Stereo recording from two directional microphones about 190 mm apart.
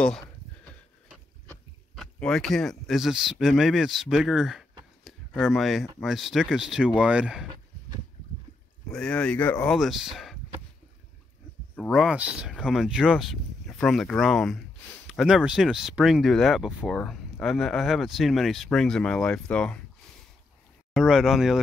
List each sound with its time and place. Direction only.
2.0 s speech: 5° left (ahead or behind)
5.0 s a sound: centre (ahead or behind)
5.9 s speech: centre (ahead or behind)
8.9 s speech: 5° left (ahead or behind)
11.7 s speech: centre (ahead or behind)
20.9 s speech: centre (ahead or behind)